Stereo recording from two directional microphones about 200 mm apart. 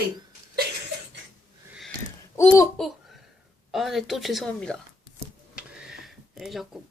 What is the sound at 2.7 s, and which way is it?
Babbling, centre (ahead or behind).